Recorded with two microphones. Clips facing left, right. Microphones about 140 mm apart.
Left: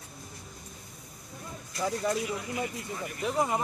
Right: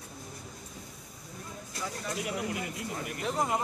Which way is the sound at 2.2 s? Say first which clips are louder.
Even; 70° right (ahead or behind).